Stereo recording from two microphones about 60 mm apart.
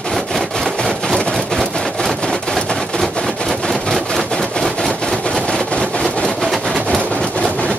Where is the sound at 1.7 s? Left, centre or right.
Centre.